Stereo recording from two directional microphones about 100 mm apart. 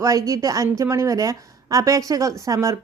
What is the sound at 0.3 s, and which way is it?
Speech, 35° right (ahead or behind).